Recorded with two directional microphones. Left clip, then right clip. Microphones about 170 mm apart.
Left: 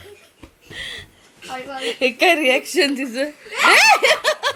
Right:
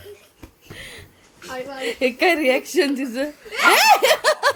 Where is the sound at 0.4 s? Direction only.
10° right (ahead or behind).